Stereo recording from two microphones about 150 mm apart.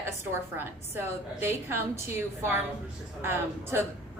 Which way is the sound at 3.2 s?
15° right (ahead or behind).